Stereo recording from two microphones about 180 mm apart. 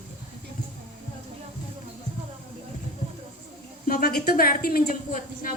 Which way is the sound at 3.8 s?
60° left (ahead or behind).